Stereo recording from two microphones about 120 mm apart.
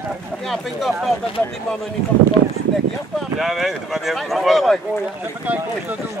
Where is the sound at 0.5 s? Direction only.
Centre (ahead or behind).